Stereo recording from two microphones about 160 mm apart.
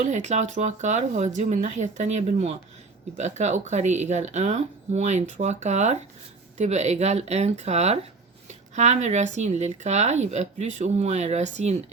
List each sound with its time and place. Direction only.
0.0 s speech: 45° right (ahead or behind)